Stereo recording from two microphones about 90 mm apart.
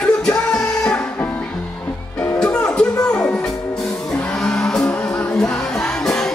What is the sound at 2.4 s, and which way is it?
Music, 10° left (ahead or behind).